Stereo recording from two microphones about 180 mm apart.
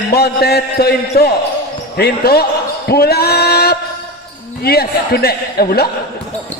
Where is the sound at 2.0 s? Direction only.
60° left (ahead or behind).